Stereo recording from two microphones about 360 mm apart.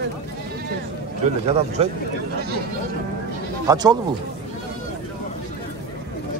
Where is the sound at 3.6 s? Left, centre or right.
Centre.